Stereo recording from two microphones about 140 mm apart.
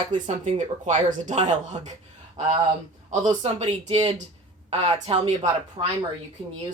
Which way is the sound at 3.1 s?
45° right (ahead or behind).